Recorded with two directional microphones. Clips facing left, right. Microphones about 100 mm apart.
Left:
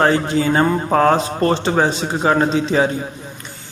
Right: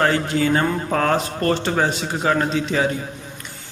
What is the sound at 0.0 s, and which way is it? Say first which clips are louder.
A man's voice: left 3 dB; 25° left (ahead or behind).